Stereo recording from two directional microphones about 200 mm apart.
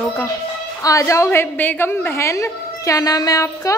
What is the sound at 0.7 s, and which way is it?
A woman's voice, 15° left (ahead or behind).